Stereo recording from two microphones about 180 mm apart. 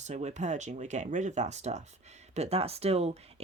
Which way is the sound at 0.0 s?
40° right (ahead or behind).